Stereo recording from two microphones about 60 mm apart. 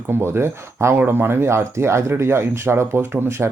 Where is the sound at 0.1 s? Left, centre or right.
Right.